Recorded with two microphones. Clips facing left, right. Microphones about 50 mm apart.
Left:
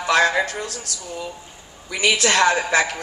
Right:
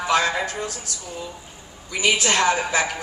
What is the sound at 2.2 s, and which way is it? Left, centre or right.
Speech, left.